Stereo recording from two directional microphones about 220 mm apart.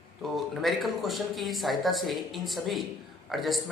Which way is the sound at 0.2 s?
Centre (ahead or behind).